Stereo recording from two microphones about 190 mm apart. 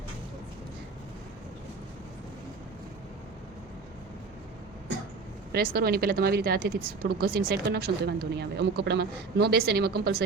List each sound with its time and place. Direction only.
5.5 s speech: 50° right (ahead or behind)